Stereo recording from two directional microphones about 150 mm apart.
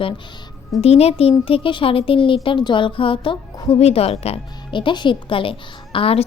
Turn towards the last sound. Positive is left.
turn(degrees=40)  # may be behind; listen again after turning